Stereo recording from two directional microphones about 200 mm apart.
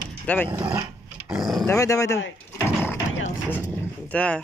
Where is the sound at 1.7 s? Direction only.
15° left (ahead or behind).